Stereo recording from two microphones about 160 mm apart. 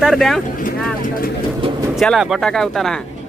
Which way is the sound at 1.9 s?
Centre (ahead or behind).